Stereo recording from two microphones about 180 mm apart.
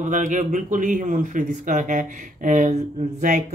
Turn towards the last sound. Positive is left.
turn(degrees=-45)  # may be behind; listen again after turning